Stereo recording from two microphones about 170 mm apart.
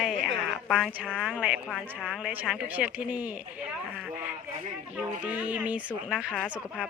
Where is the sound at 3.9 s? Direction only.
5° right (ahead or behind).